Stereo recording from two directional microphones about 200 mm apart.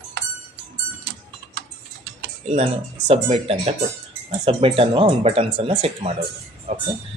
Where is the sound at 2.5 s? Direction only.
30° right (ahead or behind).